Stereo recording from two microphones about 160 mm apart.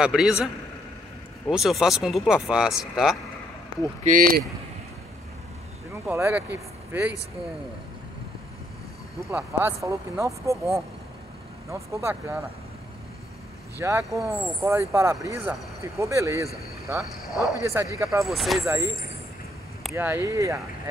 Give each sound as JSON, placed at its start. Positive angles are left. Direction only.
{"t": 0.0, "sound": "speech", "side_deg": -5}
{"t": 1.5, "sound": "speech", "side_deg": 0}
{"t": 4.0, "sound": "speech", "side_deg": -60}
{"t": 6.0, "sound": "speech", "side_deg": -15}
{"t": 9.3, "sound": "speech", "side_deg": -15}
{"t": 13.7, "sound": "speech", "side_deg": -20}
{"t": 18.2, "sound": "speech", "side_deg": 0}
{"t": 18.7, "sound": "speech", "side_deg": -20}
{"t": 20.0, "sound": "speech", "side_deg": -15}